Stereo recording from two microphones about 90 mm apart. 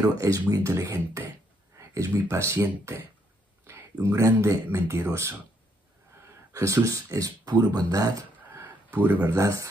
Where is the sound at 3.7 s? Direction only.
30° right (ahead or behind).